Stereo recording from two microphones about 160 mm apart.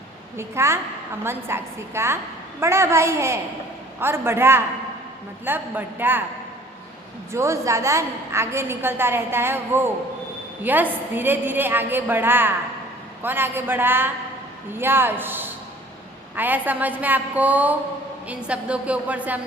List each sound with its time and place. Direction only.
0.3 s a woman's voice: 15° right (ahead or behind)
7.3 s a woman's voice: 20° right (ahead or behind)